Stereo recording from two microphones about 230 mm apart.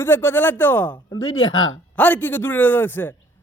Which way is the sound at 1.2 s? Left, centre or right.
Left.